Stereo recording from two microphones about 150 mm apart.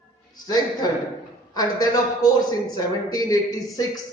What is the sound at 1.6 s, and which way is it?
A man's voice, 25° left (ahead or behind).